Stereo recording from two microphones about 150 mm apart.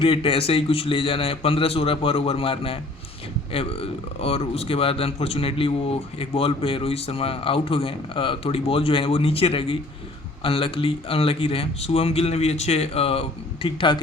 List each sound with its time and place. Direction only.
0.0 s speech: 40° left (ahead or behind)